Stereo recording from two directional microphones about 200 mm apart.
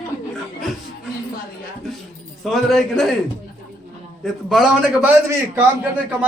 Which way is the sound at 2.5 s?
Centre (ahead or behind).